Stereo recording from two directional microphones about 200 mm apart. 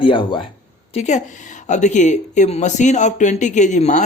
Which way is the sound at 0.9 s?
35° left (ahead or behind).